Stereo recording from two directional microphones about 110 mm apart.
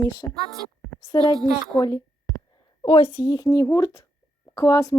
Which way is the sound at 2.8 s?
45° left (ahead or behind).